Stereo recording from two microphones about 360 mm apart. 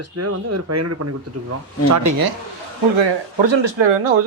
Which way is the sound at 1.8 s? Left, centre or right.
Right.